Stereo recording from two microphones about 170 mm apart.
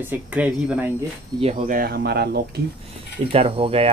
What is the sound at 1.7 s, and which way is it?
Speech, 60° right (ahead or behind).